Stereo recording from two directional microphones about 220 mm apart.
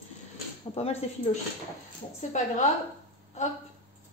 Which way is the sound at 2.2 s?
35° left (ahead or behind).